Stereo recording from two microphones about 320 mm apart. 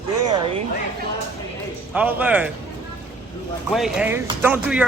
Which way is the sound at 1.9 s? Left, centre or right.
Centre.